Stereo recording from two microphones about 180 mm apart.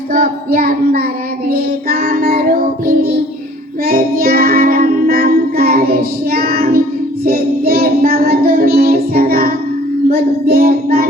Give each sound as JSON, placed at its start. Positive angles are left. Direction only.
{"t": 0.1, "sound": "child singing", "side_deg": -55}
{"t": 3.8, "sound": "music", "side_deg": -55}
{"t": 7.3, "sound": "child singing", "side_deg": -55}